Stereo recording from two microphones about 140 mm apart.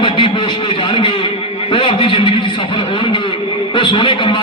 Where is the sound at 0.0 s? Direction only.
35° left (ahead or behind).